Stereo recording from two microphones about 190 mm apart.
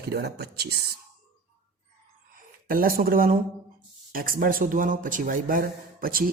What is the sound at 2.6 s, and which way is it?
A man's voice, 50° right (ahead or behind).